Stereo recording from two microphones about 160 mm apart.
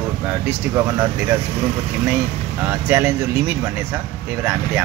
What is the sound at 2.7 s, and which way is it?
Speech, 10° right (ahead or behind).